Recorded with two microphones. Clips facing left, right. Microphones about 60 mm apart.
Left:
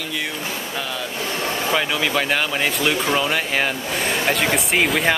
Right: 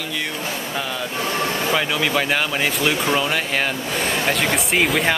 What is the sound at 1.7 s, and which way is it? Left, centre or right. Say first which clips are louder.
Speech: left 1 dB; centre.